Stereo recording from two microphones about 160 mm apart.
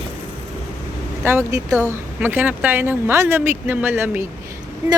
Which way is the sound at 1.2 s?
15° right (ahead or behind).